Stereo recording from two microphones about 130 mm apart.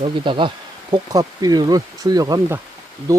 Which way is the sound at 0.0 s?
40° right (ahead or behind).